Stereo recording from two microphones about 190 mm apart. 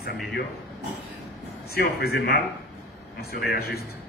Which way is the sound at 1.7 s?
55° left (ahead or behind).